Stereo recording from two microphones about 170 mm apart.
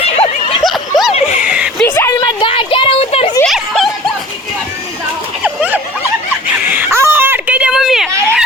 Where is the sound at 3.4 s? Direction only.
Centre (ahead or behind).